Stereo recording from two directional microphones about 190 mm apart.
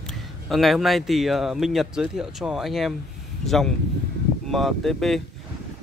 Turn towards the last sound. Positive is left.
turn(degrees=0)  # may be behind; listen again after turning